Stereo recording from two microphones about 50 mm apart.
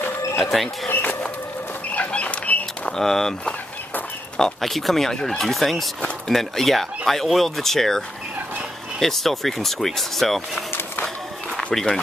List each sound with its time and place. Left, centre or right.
0.4 s speech: centre
0.8 s bird: left
1.9 s chicken: left
3.0 s speech: centre
4.6 s speech: centre
9.0 s speech: centre
11.5 s a sound: centre